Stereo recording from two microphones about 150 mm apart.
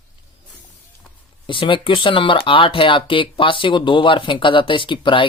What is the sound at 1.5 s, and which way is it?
Speech, 35° left (ahead or behind).